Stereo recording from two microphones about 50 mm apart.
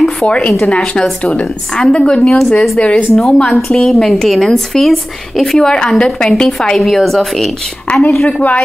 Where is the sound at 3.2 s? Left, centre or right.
Centre.